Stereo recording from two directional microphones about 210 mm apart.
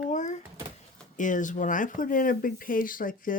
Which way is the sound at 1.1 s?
35° left (ahead or behind).